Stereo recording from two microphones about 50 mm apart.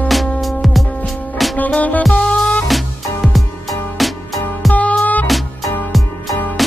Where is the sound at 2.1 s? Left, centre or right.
Centre.